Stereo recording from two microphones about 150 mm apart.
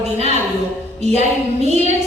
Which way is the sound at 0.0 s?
45° right (ahead or behind).